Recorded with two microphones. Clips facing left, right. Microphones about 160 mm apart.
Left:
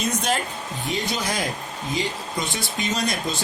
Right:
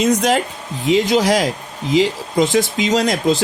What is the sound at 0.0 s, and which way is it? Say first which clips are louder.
Speech: right 9 dB; 90° right.